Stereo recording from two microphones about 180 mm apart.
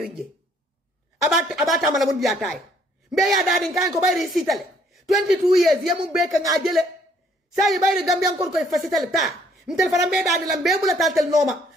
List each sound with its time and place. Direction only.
0.0 s speech: centre (ahead or behind)
1.3 s a woman's voice: centre (ahead or behind)